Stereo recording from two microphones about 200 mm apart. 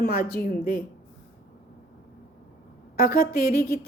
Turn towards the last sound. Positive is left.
turn(degrees=50)  # may be behind; listen again after turning